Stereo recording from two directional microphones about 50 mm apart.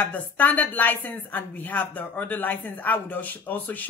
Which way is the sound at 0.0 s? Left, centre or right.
Left.